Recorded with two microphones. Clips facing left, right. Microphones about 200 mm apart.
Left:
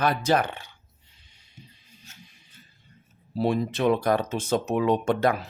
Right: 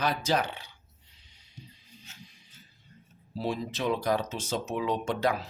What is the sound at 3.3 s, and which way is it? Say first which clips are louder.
Speech: left 7 dB; 60° left (ahead or behind).